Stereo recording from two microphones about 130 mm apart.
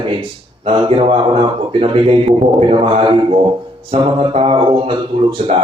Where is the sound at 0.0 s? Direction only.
40° right (ahead or behind).